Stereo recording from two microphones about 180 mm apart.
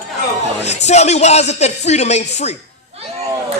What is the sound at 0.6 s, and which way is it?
A man's voice, 40° left (ahead or behind).